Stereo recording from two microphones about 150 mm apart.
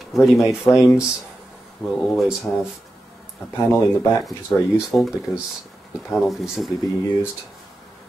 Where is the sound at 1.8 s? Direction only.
15° left (ahead or behind).